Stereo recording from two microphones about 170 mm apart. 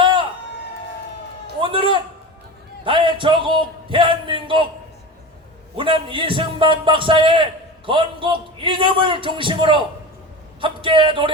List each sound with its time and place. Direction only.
0.0 s a sound: 30° right (ahead or behind)
1.6 s a man's voice: 30° right (ahead or behind)
5.7 s a man's voice: 30° right (ahead or behind)